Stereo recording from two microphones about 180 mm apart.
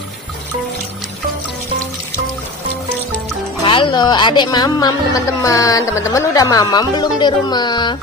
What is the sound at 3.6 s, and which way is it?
Speech, 25° left (ahead or behind).